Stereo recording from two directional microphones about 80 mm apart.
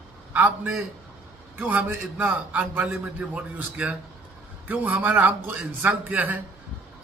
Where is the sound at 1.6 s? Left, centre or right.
Right.